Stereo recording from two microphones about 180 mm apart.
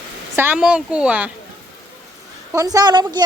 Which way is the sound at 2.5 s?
20° right (ahead or behind).